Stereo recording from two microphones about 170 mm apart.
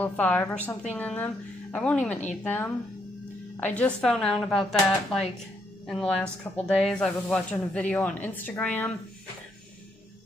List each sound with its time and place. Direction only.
0.0 s speech: 10° left (ahead or behind)